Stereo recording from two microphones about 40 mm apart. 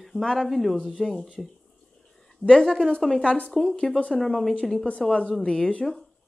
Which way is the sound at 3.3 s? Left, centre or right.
Left.